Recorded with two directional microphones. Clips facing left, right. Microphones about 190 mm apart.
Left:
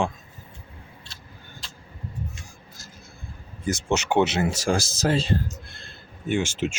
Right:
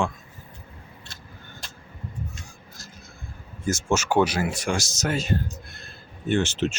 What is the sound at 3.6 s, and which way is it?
A man's voice, 20° left (ahead or behind).